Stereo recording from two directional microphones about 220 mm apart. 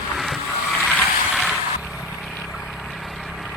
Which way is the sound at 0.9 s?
Centre (ahead or behind).